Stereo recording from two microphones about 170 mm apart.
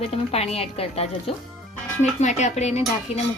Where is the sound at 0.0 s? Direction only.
35° left (ahead or behind).